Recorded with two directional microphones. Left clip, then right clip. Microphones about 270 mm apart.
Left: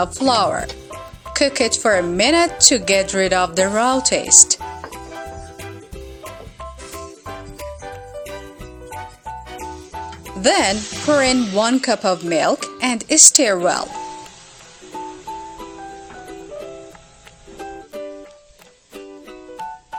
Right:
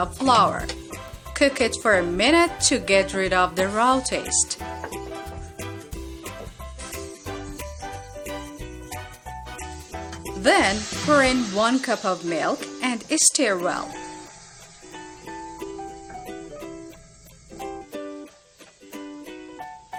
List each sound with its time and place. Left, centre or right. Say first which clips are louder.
0.0 s speech: left 2 dB; left
10.4 s speech: left 3 dB; left